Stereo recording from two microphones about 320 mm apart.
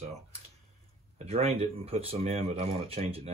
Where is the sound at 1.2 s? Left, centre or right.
Centre.